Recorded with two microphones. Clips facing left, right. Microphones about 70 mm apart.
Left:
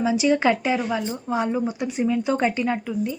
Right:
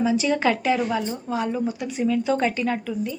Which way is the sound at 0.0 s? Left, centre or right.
Centre.